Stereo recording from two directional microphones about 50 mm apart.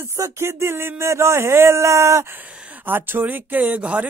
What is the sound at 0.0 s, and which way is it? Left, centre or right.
Speech, right.